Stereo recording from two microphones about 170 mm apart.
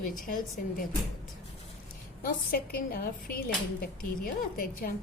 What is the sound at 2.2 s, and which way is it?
Speech, 65° left (ahead or behind).